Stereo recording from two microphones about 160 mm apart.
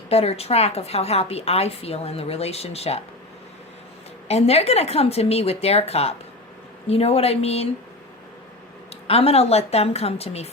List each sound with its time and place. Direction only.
0.1 s a woman's voice: 40° left (ahead or behind)
4.3 s a woman's voice: 40° left (ahead or behind)
9.0 s a woman's voice: 40° left (ahead or behind)